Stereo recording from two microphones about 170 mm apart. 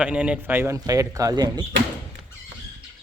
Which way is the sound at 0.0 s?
5° right (ahead or behind).